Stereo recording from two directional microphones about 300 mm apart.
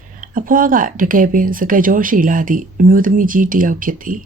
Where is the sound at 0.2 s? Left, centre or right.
Right.